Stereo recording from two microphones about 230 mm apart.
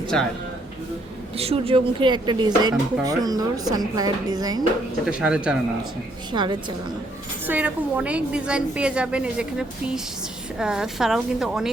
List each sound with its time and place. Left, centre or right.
1.4 s speech: right
5.0 s a woman's voice: centre
6.3 s a woman's voice: centre
7.4 s a woman's voice: centre